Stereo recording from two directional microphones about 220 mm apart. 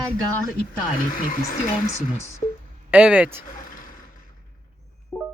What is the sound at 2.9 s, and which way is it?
Speech, 5° right (ahead or behind).